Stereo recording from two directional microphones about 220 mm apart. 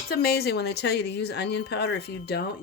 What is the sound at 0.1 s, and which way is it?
Speech, 45° left (ahead or behind).